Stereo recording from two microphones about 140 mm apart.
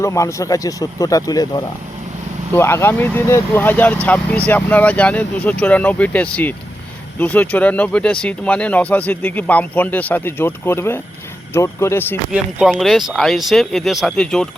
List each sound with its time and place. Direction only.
0.0 s speech: 20° left (ahead or behind)
12.3 s speech: 5° right (ahead or behind)